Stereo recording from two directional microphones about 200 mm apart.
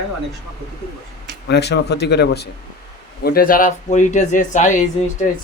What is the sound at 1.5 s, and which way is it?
Speech, 55° left (ahead or behind).